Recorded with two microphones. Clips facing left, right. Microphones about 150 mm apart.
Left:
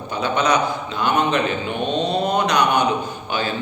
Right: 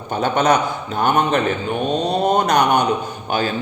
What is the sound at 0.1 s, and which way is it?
A man's voice, 50° right (ahead or behind).